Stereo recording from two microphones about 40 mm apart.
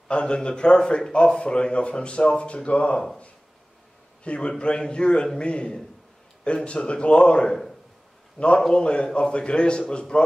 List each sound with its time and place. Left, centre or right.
0.1 s a man's voice: left
4.2 s a man's voice: left